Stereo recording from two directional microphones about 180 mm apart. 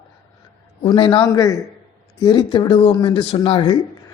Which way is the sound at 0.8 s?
30° left (ahead or behind).